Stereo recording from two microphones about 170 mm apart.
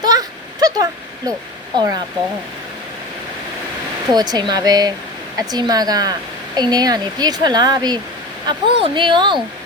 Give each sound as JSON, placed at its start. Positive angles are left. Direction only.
{"t": 0.0, "sound": "a sound", "side_deg": -20}
{"t": 1.7, "sound": "speech", "side_deg": -25}
{"t": 4.1, "sound": "speech", "side_deg": -25}